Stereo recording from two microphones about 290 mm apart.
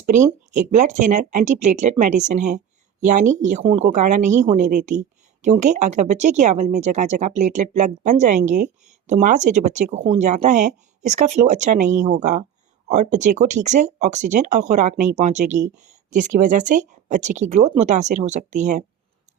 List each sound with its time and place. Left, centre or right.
0.7 s speech: right